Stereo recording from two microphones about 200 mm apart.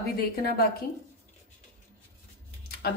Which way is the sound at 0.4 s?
50° left (ahead or behind).